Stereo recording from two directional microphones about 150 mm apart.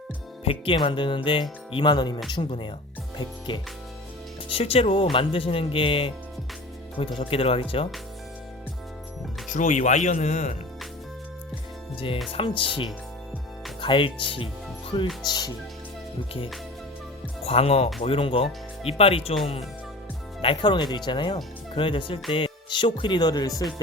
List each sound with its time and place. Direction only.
0.6 s speech: 35° left (ahead or behind)
9.5 s speech: 55° left (ahead or behind)
11.9 s speech: 35° left (ahead or behind)
17.4 s speech: 40° left (ahead or behind)
20.4 s speech: 35° left (ahead or behind)